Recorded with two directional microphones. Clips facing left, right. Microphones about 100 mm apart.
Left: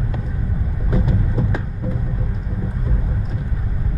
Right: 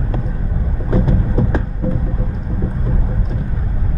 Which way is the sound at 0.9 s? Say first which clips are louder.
Right 4 dB; 35° right (ahead or behind).